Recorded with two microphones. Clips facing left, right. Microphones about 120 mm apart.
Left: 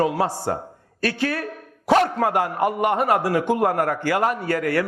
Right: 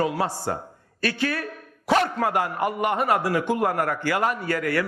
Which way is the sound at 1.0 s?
50° left (ahead or behind).